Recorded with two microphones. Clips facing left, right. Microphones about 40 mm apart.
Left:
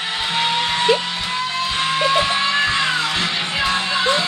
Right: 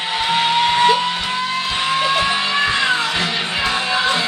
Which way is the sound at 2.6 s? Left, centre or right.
Centre.